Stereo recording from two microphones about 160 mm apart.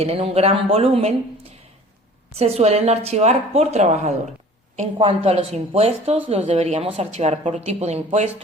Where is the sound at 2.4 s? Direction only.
40° right (ahead or behind).